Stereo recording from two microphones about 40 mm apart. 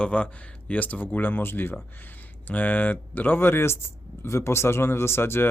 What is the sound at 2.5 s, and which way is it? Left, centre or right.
Speech, left.